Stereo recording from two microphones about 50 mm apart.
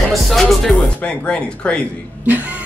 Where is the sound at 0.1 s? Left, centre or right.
Centre.